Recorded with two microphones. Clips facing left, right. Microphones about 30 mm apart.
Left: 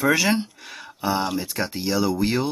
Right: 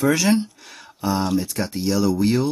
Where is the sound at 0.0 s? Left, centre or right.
Centre.